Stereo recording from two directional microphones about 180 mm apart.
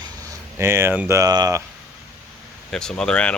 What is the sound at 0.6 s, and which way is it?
Speech, 15° right (ahead or behind).